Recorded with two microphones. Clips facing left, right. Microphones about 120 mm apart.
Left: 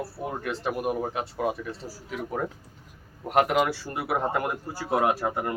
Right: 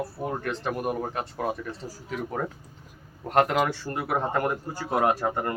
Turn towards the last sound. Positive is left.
turn(degrees=5)  # may be behind; listen again after turning